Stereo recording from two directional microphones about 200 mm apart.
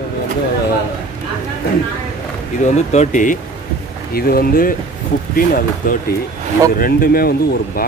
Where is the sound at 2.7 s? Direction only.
35° left (ahead or behind).